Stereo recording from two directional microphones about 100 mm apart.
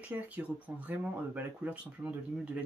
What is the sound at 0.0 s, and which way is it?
Speech, 15° right (ahead or behind).